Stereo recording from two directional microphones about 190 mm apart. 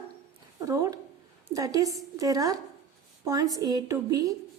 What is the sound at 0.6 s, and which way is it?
A woman's voice, 20° right (ahead or behind).